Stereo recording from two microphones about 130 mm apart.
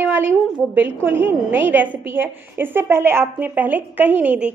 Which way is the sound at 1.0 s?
15° right (ahead or behind).